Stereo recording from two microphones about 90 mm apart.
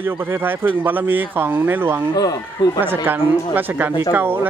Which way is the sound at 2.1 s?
45° left (ahead or behind).